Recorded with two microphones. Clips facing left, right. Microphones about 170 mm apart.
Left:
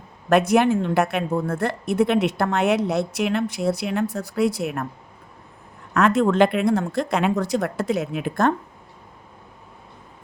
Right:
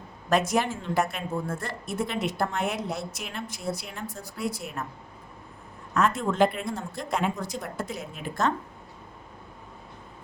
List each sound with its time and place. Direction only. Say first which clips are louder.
0.3 s a woman's voice: left 8 dB; 60° left (ahead or behind)
5.9 s a woman's voice: left 7 dB; 70° left (ahead or behind)